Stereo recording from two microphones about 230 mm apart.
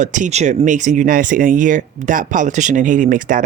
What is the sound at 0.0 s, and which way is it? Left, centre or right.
Speech, right.